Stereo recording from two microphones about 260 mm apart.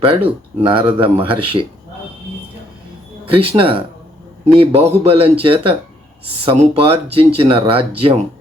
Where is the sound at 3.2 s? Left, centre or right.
Right.